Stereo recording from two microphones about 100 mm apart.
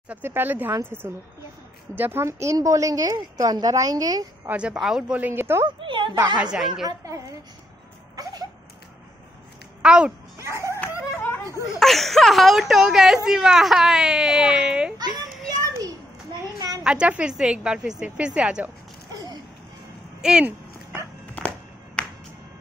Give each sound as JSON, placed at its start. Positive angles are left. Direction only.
{"t": 0.1, "sound": "a woman's voice", "side_deg": -20}
{"t": 4.5, "sound": "a woman's voice", "side_deg": -10}
{"t": 5.8, "sound": "a woman's voice", "side_deg": -55}
{"t": 6.3, "sound": "a woman's voice", "side_deg": -10}
{"t": 6.9, "sound": "a woman's voice", "side_deg": -35}
{"t": 8.2, "sound": "a sound", "side_deg": -40}
{"t": 9.8, "sound": "a child's voice", "side_deg": -10}
{"t": 10.4, "sound": "dog", "side_deg": -30}
{"t": 11.8, "sound": "speech", "side_deg": 0}
{"t": 16.8, "sound": "a woman's voice", "side_deg": -10}
{"t": 19.1, "sound": "a sound", "side_deg": -40}
{"t": 20.2, "sound": "speech", "side_deg": -10}
{"t": 22.0, "sound": "music", "side_deg": 10}